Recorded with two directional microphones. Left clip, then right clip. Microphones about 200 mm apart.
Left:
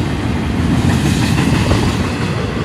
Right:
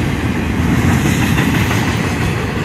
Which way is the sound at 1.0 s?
Centre (ahead or behind).